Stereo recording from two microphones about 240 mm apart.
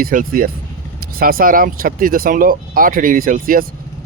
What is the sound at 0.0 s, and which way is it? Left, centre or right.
Speech, right.